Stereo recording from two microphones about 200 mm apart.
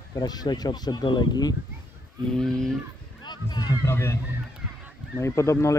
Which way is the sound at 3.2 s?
20° left (ahead or behind).